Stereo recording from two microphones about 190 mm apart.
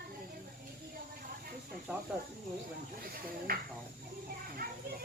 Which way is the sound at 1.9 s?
5° right (ahead or behind).